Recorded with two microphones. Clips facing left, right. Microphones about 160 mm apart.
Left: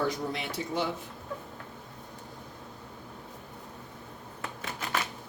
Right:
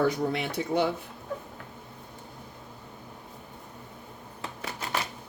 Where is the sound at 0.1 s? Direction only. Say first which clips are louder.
Right 5 dB; 60° right (ahead or behind).